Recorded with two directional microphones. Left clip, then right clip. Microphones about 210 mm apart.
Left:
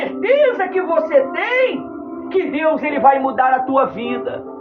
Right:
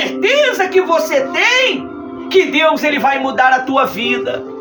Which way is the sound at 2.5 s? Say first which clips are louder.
Right 5 dB; 20° right (ahead or behind).